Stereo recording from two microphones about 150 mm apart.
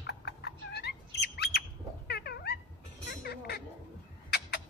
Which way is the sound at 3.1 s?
90° left.